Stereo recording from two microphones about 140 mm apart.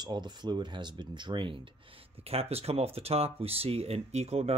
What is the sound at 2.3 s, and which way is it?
Speech, 45° right (ahead or behind).